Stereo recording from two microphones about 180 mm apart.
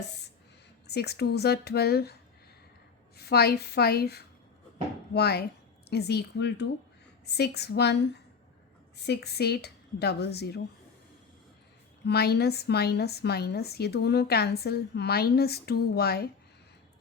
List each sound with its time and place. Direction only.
0.9 s a woman's voice: 65° left (ahead or behind)
3.2 s a woman's voice: 60° left (ahead or behind)
9.0 s a woman's voice: 70° left (ahead or behind)
12.0 s a woman's voice: 65° left (ahead or behind)